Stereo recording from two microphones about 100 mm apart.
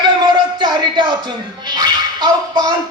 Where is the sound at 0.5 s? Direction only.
50° right (ahead or behind).